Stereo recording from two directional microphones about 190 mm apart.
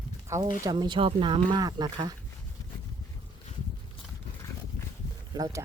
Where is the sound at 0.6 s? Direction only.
25° right (ahead or behind).